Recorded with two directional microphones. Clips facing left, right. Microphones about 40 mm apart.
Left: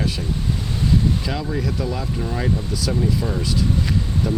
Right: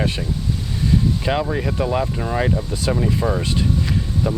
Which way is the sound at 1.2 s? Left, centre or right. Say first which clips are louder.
Right 4 dB; right.